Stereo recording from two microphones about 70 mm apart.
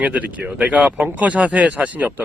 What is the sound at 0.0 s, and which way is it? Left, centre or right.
Speech, centre.